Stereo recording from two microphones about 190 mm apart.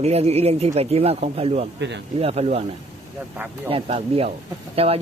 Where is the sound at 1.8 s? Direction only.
65° right (ahead or behind).